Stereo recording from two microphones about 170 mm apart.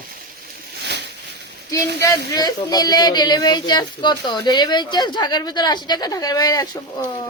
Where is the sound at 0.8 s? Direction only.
90° right.